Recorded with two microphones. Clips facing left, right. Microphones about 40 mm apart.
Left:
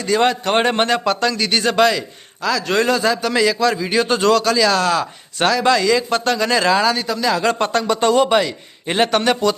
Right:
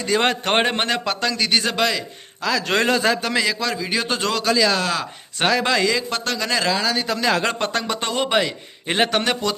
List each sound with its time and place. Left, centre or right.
0.0 s a man's voice: centre
0.6 s a man's voice: centre
2.6 s a man's voice: right
3.3 s a man's voice: centre
6.0 s a man's voice: centre